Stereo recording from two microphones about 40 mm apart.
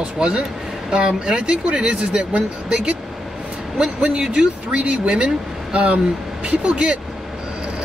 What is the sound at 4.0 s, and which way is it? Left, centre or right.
Speech, right.